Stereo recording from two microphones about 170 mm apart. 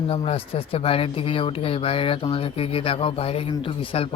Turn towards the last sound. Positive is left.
turn(degrees=30)  # may be behind; listen again after turning